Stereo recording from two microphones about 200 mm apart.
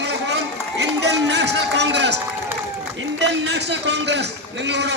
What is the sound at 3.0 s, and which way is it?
A man's voice, 60° right (ahead or behind).